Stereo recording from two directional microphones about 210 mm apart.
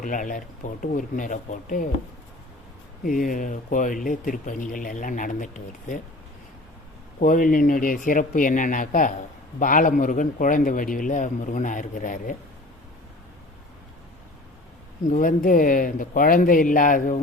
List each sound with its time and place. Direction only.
0.0 s speech: 40° left (ahead or behind)
3.0 s speech: 40° left (ahead or behind)
7.2 s speech: 40° left (ahead or behind)
15.1 s speech: 40° left (ahead or behind)